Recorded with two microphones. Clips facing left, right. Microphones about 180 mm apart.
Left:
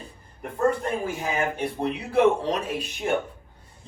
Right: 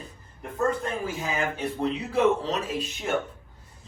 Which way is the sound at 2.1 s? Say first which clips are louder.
Left 4 dB; 60° left (ahead or behind).